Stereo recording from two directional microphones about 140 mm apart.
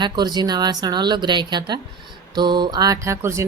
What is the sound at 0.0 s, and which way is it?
Speech, 30° right (ahead or behind).